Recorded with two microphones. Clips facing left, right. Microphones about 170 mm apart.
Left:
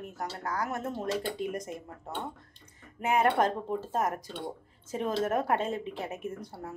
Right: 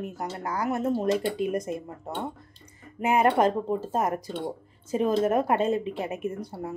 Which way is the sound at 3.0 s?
15° right (ahead or behind).